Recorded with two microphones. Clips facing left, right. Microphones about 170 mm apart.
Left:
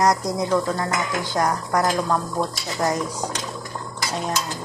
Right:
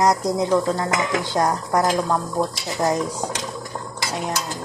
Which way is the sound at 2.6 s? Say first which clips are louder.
Right 2 dB; 20° right (ahead or behind).